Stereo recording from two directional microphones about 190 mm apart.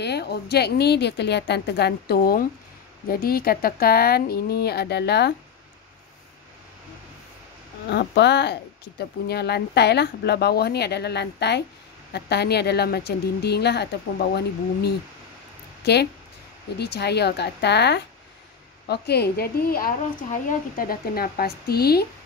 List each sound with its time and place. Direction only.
0.0 s a woman's voice: 60° left (ahead or behind)
7.9 s a woman's voice: 60° left (ahead or behind)